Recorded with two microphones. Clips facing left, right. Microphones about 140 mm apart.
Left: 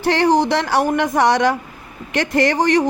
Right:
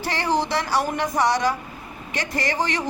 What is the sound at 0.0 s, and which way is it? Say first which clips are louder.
A woman's voice: left 8 dB; 60° left (ahead or behind).